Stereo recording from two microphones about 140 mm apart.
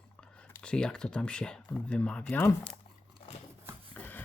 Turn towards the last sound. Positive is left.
turn(degrees=15)  # may be behind; listen again after turning